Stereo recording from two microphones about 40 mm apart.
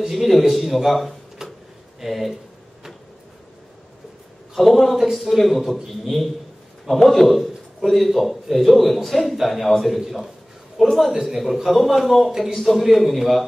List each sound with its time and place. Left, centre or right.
0.0 s a man's voice: centre
1.4 s drawer open or close: centre
2.0 s speech: centre
4.6 s a man's voice: centre